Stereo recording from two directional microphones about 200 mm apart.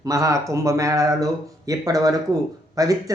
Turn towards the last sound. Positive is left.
turn(degrees=-15)  # may be behind; listen again after turning